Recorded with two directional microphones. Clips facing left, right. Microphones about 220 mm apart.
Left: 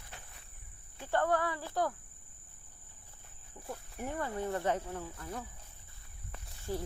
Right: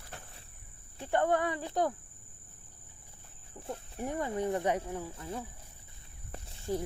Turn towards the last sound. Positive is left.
turn(degrees=-20)  # may be behind; listen again after turning